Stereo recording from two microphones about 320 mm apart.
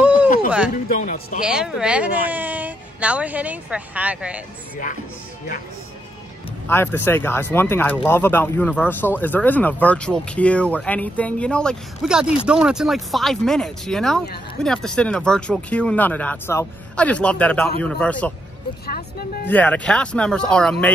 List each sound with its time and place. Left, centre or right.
0.9 s speech: left
1.4 s speech: centre
6.7 s speech: centre
18.9 s speech: left
19.4 s speech: centre